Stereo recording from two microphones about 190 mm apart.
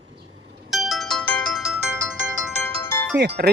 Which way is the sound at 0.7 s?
Centre (ahead or behind).